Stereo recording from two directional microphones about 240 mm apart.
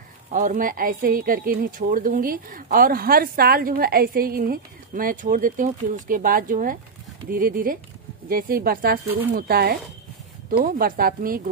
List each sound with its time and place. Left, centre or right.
0.3 s a woman's voice: right